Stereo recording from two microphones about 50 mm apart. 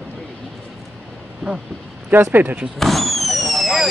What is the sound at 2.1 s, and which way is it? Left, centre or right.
Speech, right.